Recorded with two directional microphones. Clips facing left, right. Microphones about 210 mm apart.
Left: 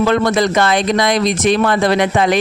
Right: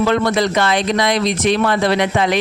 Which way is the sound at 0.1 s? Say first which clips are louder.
Left 2 dB; 45° left (ahead or behind).